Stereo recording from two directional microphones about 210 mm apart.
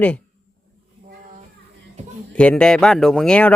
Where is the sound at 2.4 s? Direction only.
5° left (ahead or behind).